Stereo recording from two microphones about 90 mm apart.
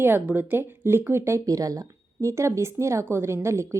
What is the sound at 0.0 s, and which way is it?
A woman's voice, 20° right (ahead or behind).